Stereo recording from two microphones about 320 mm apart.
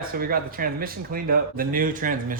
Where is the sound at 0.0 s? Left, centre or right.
Right.